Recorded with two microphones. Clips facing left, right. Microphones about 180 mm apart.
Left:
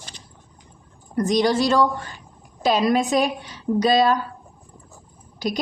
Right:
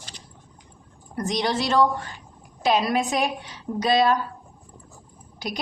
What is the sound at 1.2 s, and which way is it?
Speech, 40° left (ahead or behind).